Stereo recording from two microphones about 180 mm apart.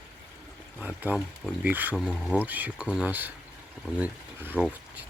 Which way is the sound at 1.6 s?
10° right (ahead or behind).